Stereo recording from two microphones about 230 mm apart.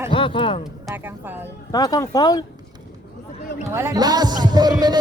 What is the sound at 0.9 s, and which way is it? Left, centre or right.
Speech, centre.